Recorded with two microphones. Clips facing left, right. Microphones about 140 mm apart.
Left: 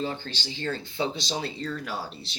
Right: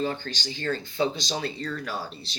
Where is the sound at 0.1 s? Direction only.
25° left (ahead or behind).